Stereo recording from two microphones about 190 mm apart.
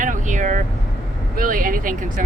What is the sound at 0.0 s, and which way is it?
Vehicle, 45° right (ahead or behind).